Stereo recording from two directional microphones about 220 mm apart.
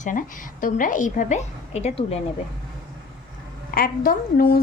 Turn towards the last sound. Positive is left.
turn(degrees=40)  # may be behind; listen again after turning